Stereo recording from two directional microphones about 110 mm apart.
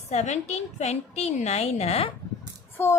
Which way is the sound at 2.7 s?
20° left (ahead or behind).